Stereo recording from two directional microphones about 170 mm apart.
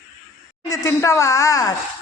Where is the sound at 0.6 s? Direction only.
20° left (ahead or behind).